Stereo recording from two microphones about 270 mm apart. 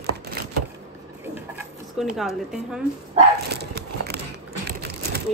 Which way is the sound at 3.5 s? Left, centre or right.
Right.